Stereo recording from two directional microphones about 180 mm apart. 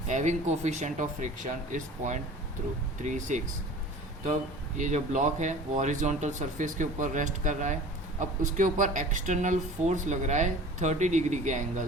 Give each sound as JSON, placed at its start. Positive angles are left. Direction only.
{"t": 0.1, "sound": "speech", "side_deg": -40}
{"t": 4.8, "sound": "speech", "side_deg": -40}